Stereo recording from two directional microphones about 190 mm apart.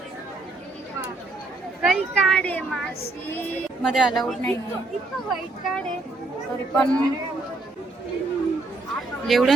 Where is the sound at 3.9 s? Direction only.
Centre (ahead or behind).